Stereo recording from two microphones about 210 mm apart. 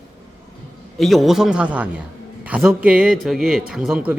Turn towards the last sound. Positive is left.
turn(degrees=-5)  # may be behind; listen again after turning